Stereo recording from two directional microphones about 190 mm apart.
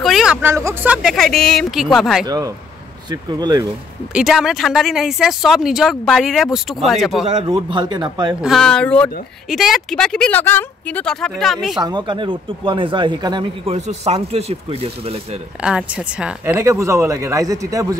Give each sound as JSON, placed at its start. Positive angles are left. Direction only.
{"t": 0.0, "sound": "speech", "side_deg": 0}
{"t": 2.2, "sound": "a man's voice", "side_deg": -20}
{"t": 4.1, "sound": "speech", "side_deg": -5}
{"t": 7.2, "sound": "a man's voice", "side_deg": -25}
{"t": 8.4, "sound": "speech", "side_deg": 0}
{"t": 11.8, "sound": "a man's voice", "side_deg": -25}
{"t": 13.7, "sound": "speech", "side_deg": -35}
{"t": 15.6, "sound": "speech", "side_deg": -5}